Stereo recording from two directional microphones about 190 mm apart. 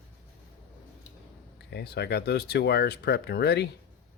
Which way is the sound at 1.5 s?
60° left (ahead or behind).